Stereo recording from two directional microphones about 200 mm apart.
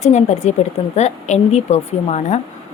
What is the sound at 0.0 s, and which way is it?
A woman's voice, 35° left (ahead or behind).